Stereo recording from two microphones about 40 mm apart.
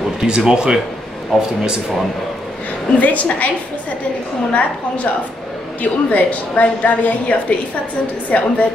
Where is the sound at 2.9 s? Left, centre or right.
Left.